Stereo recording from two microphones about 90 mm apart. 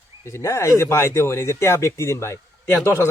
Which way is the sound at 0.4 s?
35° left (ahead or behind).